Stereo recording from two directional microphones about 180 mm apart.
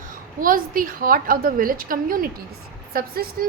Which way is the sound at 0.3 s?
50° right (ahead or behind).